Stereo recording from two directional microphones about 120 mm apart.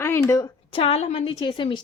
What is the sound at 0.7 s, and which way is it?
Speech, 55° left (ahead or behind).